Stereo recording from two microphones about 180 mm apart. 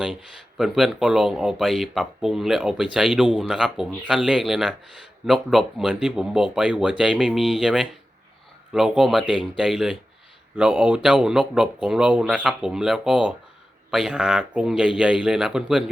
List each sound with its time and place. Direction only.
0.0 s speech: centre (ahead or behind)